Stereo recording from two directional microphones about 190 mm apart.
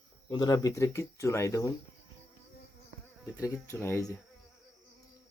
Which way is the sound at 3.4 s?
15° left (ahead or behind).